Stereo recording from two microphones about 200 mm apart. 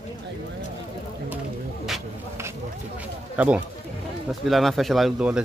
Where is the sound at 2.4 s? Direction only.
15° right (ahead or behind).